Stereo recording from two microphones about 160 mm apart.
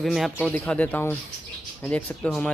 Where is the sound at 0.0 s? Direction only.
Centre (ahead or behind).